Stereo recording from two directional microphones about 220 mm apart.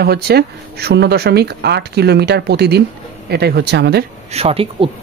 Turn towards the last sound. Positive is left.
turn(degrees=-25)  # may be behind; listen again after turning